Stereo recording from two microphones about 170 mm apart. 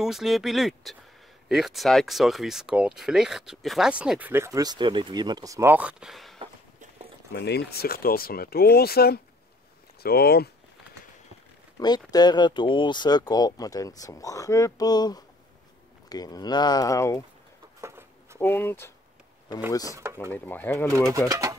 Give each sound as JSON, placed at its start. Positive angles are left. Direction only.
{"t": 0.0, "sound": "speech", "side_deg": 0}
{"t": 7.3, "sound": "speech", "side_deg": 75}
{"t": 11.8, "sound": "speech", "side_deg": 25}
{"t": 17.7, "sound": "a sound", "side_deg": -15}
{"t": 18.4, "sound": "speech", "side_deg": 10}
{"t": 19.9, "sound": "speech", "side_deg": -15}
{"t": 20.3, "sound": "speech", "side_deg": 10}
{"t": 21.3, "sound": "speech", "side_deg": -20}